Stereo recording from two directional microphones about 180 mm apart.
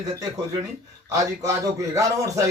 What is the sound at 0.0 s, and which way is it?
A man's voice, 20° right (ahead or behind).